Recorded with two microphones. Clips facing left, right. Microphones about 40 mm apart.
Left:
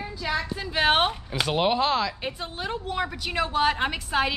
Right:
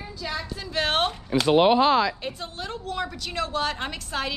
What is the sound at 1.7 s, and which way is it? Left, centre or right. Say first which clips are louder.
Speech: right 4 dB; right.